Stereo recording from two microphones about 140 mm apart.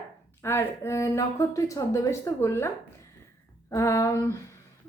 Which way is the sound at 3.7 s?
20° left (ahead or behind).